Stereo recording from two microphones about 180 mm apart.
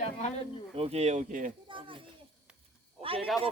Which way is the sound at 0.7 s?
35° right (ahead or behind).